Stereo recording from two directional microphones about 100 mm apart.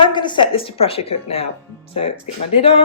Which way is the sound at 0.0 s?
50° left (ahead or behind).